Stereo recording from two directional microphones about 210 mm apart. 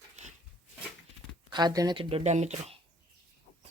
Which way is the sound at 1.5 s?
20° right (ahead or behind).